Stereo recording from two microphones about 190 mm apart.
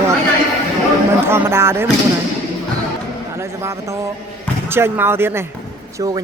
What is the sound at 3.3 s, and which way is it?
Speech, 15° right (ahead or behind).